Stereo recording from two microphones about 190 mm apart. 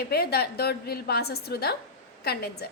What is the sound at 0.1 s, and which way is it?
A woman's voice, 55° left (ahead or behind).